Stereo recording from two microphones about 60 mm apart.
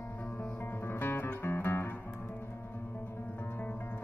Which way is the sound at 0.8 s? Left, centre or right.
Left.